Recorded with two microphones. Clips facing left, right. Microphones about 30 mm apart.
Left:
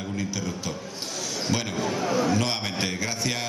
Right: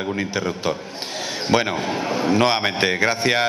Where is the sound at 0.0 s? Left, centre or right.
Right.